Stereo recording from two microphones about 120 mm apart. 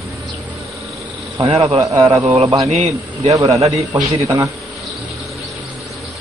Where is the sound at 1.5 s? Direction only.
55° right (ahead or behind).